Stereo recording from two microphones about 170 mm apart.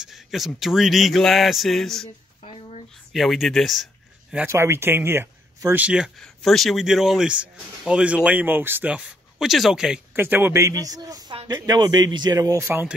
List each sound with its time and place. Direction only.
0.0 s a man's voice: centre (ahead or behind)
2.4 s a sound: 35° left (ahead or behind)
3.1 s speech: centre (ahead or behind)
4.5 s speech: 15° right (ahead or behind)